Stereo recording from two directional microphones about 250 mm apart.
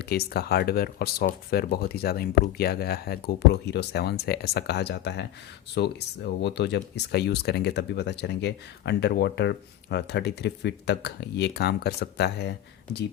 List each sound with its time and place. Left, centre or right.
0.0 s speech: left